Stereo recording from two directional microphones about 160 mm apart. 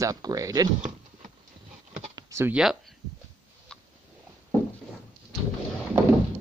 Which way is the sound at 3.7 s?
5° left (ahead or behind).